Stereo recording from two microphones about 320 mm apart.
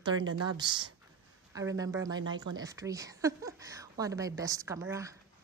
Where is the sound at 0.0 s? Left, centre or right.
Centre.